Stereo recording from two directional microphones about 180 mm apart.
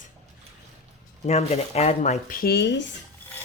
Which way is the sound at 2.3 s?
60° left (ahead or behind).